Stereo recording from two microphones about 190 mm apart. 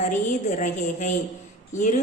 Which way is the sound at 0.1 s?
40° left (ahead or behind).